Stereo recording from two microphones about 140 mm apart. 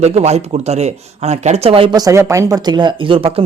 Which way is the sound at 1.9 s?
25° right (ahead or behind).